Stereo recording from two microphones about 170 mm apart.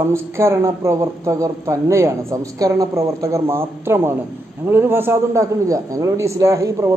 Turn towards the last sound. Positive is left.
turn(degrees=-20)  # may be behind; listen again after turning